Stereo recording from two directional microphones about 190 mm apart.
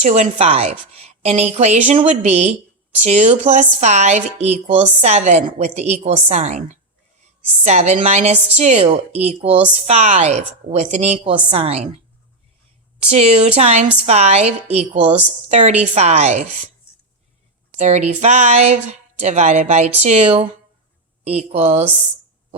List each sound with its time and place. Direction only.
0.0 s speech: 35° right (ahead or behind)
13.1 s speech: 35° right (ahead or behind)
17.7 s speech: 35° right (ahead or behind)